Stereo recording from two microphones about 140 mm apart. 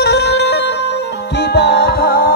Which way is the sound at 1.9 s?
90° left.